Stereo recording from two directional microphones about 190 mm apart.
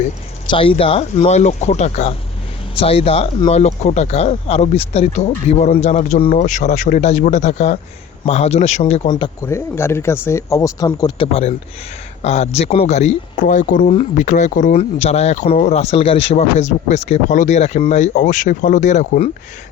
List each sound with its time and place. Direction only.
0.4 s speech: 30° left (ahead or behind)